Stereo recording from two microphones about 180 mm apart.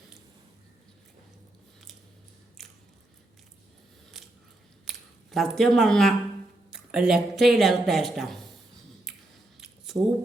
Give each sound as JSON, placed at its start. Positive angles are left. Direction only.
{"t": 2.6, "sound": "biting", "side_deg": 0}
{"t": 4.1, "sound": "biting", "side_deg": 0}
{"t": 4.9, "sound": "speech", "side_deg": 0}
{"t": 9.6, "sound": "a sound", "side_deg": 0}